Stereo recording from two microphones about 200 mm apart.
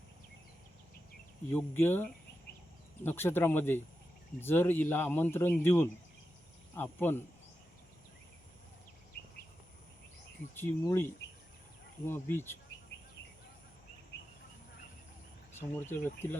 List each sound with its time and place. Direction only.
1.5 s speech: 10° left (ahead or behind)
9.2 s a sound: 50° left (ahead or behind)
10.5 s speech: 10° left (ahead or behind)
12.0 s speech: 10° left (ahead or behind)
15.9 s speech: 10° left (ahead or behind)